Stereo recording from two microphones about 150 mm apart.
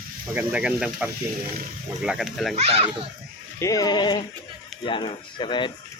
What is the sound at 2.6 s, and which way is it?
Speech, 40° right (ahead or behind).